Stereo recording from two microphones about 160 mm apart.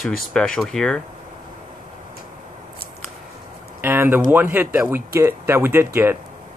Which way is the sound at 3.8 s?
15° right (ahead or behind).